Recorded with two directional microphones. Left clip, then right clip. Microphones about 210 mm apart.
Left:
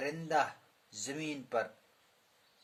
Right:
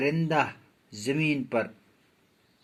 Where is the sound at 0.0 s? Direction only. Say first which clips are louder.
Right 7 dB; 15° right (ahead or behind).